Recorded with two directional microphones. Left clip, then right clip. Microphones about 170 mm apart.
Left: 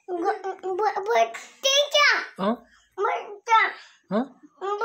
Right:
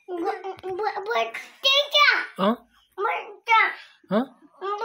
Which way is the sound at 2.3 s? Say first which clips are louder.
Right 3 dB; 15° right (ahead or behind).